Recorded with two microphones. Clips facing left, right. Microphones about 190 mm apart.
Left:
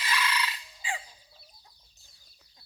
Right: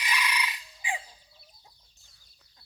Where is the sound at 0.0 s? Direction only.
15° right (ahead or behind).